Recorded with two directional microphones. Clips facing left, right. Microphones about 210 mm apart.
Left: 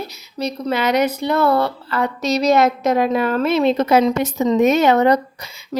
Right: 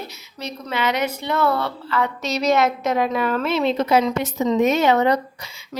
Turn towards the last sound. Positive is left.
turn(degrees=45)  # may be behind; listen again after turning